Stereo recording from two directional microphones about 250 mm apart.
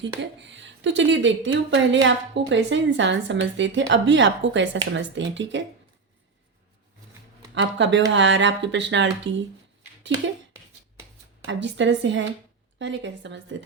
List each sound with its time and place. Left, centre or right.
0.2 s speech: right
7.5 s speech: right
11.4 s speech: right